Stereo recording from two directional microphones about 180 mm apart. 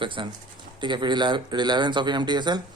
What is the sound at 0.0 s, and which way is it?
A man's voice, 25° right (ahead or behind).